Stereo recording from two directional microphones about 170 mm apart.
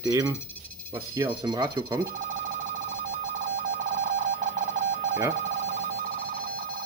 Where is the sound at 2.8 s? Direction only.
45° right (ahead or behind).